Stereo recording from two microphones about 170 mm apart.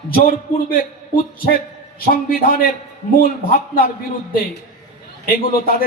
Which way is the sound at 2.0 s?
60° left (ahead or behind).